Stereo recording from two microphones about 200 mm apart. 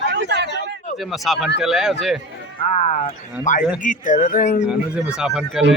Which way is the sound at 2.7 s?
30° left (ahead or behind).